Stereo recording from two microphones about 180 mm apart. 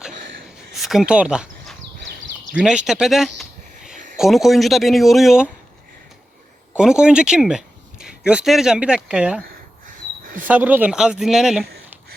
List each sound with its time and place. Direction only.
0.7 s speech: centre (ahead or behind)
6.7 s speech: 5° right (ahead or behind)
9.8 s a sound: 50° right (ahead or behind)
10.4 s speech: 10° right (ahead or behind)